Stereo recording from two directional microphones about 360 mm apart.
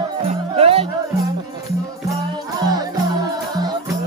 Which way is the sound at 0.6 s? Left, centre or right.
Centre.